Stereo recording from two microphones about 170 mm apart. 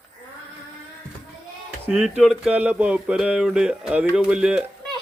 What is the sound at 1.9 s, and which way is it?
Speech, 5° right (ahead or behind).